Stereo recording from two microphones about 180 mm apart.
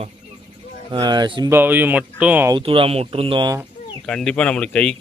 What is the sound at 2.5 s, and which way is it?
Speech, 30° right (ahead or behind).